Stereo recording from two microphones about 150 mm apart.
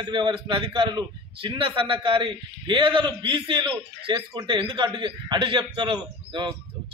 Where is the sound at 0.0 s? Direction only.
30° right (ahead or behind).